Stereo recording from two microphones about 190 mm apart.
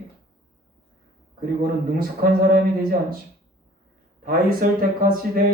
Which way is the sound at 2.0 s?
50° right (ahead or behind).